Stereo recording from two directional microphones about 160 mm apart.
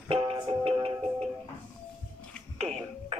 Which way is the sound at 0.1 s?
30° right (ahead or behind).